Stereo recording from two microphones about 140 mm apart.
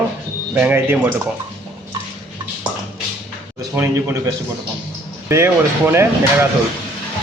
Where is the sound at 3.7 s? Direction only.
20° right (ahead or behind).